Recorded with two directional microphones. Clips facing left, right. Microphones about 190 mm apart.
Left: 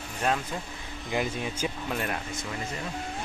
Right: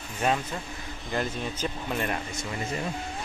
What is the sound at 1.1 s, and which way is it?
Speech, 10° left (ahead or behind).